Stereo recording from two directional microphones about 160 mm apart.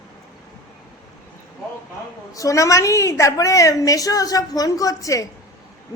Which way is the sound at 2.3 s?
20° left (ahead or behind).